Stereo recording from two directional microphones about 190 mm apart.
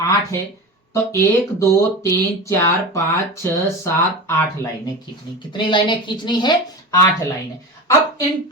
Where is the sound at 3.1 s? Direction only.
15° left (ahead or behind).